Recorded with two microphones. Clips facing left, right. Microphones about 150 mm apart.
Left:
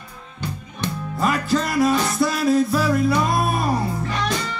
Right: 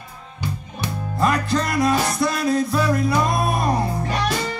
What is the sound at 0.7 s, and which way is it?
Music, centre (ahead or behind).